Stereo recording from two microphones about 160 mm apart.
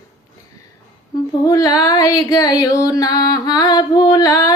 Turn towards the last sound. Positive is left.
turn(degrees=20)  # may be behind; listen again after turning